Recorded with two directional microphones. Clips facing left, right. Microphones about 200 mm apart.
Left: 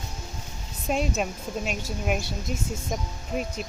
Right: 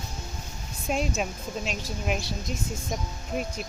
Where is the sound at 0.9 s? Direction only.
Centre (ahead or behind).